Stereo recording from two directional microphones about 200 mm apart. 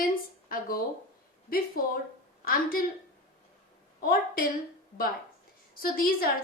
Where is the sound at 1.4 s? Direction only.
45° left (ahead or behind).